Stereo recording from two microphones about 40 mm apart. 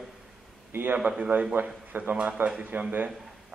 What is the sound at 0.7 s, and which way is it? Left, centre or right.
Speech, right.